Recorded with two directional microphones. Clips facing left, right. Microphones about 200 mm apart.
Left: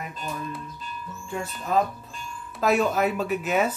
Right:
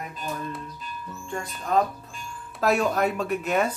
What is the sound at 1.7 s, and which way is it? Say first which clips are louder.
Speech: right 1 dB; 5° left (ahead or behind).